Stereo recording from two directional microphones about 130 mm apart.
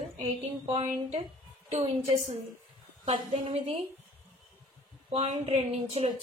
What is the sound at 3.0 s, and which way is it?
Speech, 40° right (ahead or behind).